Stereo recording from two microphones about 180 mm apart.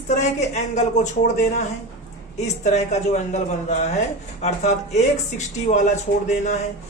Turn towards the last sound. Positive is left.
turn(degrees=40)  # may be behind; listen again after turning